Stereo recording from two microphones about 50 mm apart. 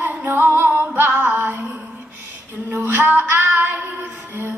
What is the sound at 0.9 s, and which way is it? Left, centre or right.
Female singing, right.